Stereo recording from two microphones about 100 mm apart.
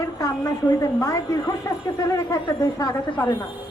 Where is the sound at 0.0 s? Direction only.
30° left (ahead or behind).